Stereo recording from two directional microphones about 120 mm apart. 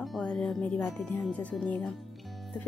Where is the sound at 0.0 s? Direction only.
Centre (ahead or behind).